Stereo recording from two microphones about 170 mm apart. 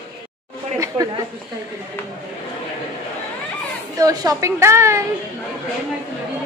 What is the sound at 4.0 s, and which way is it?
Speech, 20° right (ahead or behind).